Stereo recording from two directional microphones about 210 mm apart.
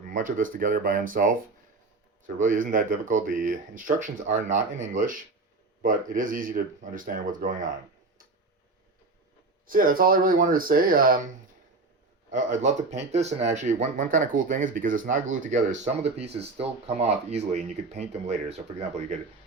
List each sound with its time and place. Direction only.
0.0 s speech: 40° right (ahead or behind)
9.6 s speech: 40° right (ahead or behind)
12.3 s speech: 35° right (ahead or behind)